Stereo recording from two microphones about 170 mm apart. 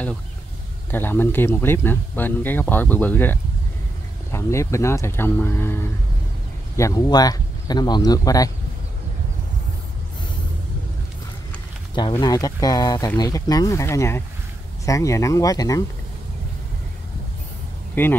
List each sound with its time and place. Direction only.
0.9 s speech: 10° left (ahead or behind)
11.9 s speech: 25° left (ahead or behind)
18.0 s speech: 10° left (ahead or behind)